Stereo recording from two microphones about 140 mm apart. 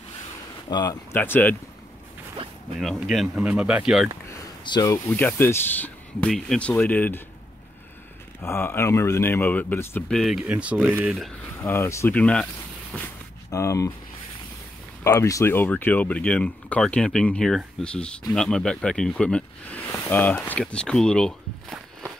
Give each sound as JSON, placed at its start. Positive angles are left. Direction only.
{"t": 0.7, "sound": "speech", "side_deg": 30}
{"t": 1.1, "sound": "speech", "side_deg": 15}
{"t": 2.8, "sound": "speech", "side_deg": 0}
{"t": 4.6, "sound": "speech", "side_deg": 30}
{"t": 8.4, "sound": "speech", "side_deg": 15}
{"t": 10.1, "sound": "speech", "side_deg": 0}
{"t": 11.1, "sound": "speech", "side_deg": 0}
{"t": 11.5, "sound": "speech", "side_deg": 15}
{"t": 13.5, "sound": "speech", "side_deg": 20}
{"t": 15.0, "sound": "speech", "side_deg": 25}